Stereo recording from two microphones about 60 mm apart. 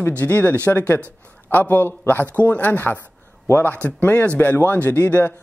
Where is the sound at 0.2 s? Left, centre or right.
Left.